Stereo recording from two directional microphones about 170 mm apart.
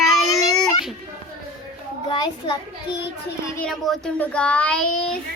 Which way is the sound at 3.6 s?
Centre (ahead or behind).